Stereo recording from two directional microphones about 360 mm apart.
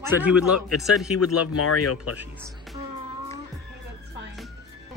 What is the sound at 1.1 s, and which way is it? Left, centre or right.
Speech, left.